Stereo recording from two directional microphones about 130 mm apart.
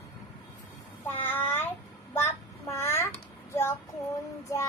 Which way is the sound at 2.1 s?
20° left (ahead or behind).